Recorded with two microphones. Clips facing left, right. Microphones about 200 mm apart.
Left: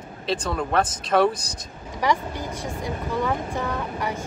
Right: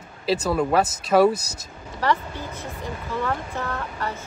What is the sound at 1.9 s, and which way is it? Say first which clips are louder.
A woman's voice: even; 15° left (ahead or behind).